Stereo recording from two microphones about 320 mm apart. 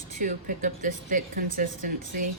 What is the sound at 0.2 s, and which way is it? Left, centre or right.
A woman's voice, right.